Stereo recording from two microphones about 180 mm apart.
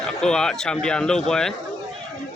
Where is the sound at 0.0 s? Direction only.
5° left (ahead or behind).